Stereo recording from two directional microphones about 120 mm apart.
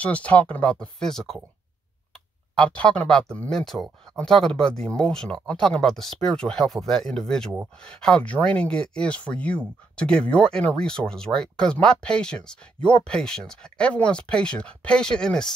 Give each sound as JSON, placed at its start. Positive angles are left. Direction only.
{"t": 0.0, "sound": "speech", "side_deg": 10}
{"t": 2.5, "sound": "speech", "side_deg": 5}